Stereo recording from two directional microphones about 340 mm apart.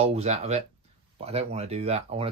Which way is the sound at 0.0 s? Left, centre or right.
Centre.